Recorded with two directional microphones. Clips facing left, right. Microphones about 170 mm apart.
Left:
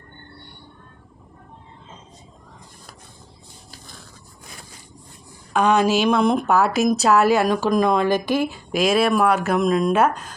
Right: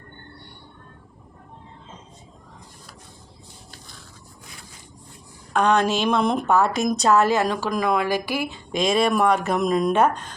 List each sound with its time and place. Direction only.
5.5 s speech: 5° left (ahead or behind); by 7.9 s 20° left (ahead or behind)
7.9 s speech: 10° right (ahead or behind)
8.2 s speech: 20° left (ahead or behind)
8.4 s speech: 5° left (ahead or behind)